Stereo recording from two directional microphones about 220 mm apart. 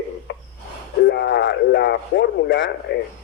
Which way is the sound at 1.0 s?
55° left (ahead or behind).